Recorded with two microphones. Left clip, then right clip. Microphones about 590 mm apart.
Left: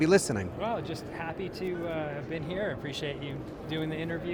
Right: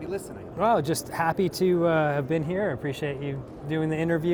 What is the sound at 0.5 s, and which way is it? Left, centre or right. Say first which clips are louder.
Speech: right 10 dB; right.